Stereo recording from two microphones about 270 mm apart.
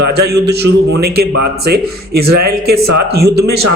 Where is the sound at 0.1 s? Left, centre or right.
Right.